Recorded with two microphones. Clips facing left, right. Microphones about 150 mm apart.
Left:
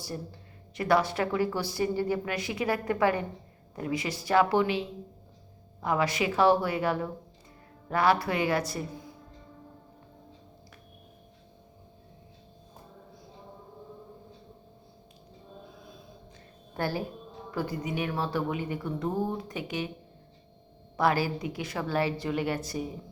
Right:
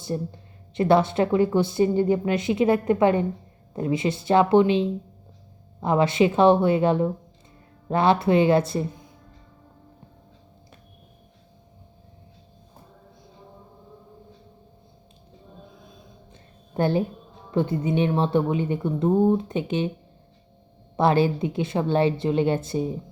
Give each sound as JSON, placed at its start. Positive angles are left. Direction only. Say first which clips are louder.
{"t": 0.0, "sound": "speech", "louder": "right 9 dB", "side_deg": -25}
{"t": 16.7, "sound": "a woman's voice", "louder": "right 9 dB", "side_deg": -20}
{"t": 20.9, "sound": "speech", "louder": "right 6 dB", "side_deg": -25}